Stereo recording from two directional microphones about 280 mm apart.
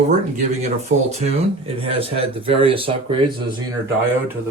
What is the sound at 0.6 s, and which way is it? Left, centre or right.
Speech, right.